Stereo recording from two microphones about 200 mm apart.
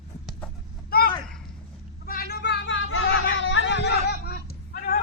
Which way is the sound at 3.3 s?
70° left (ahead or behind).